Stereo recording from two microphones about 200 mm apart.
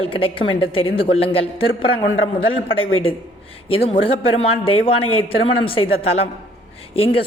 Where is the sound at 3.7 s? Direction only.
30° left (ahead or behind).